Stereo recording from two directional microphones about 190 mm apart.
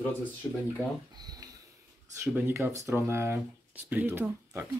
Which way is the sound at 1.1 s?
20° right (ahead or behind).